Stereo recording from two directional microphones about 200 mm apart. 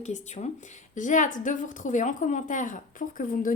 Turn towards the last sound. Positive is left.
turn(degrees=45)  # may be behind; listen again after turning